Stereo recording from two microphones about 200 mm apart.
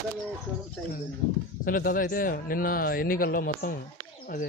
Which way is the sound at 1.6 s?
45° left (ahead or behind).